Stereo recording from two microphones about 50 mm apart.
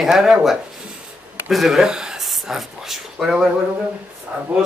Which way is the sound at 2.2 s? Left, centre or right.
Centre.